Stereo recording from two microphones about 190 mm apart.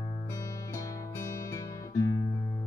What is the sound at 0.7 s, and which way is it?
Music, 15° left (ahead or behind).